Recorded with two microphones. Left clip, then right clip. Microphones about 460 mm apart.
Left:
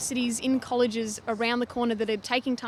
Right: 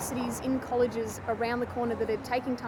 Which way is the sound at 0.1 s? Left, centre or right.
Left.